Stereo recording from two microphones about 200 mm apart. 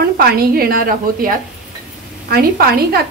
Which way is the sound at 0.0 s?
50° right (ahead or behind).